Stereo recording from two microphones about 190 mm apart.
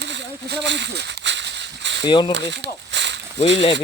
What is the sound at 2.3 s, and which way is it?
Speech, 65° right (ahead or behind).